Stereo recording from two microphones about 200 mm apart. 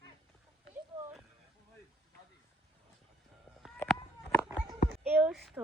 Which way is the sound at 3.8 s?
10° left (ahead or behind).